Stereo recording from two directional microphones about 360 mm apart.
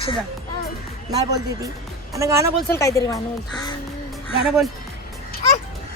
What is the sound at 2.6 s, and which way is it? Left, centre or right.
Speech, centre.